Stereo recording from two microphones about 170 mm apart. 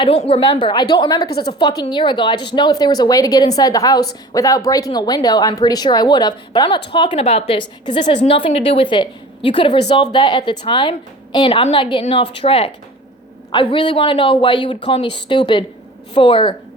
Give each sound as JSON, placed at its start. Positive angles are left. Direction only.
{"t": 0.3, "sound": "a woman's voice", "side_deg": 30}